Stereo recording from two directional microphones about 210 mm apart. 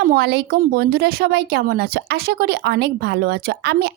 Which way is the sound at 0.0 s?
50° right (ahead or behind).